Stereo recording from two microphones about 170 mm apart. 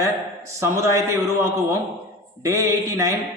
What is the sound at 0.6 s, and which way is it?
Speech, 15° right (ahead or behind).